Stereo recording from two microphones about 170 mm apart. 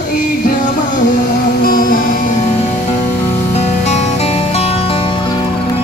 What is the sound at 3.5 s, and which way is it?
Music, 40° left (ahead or behind).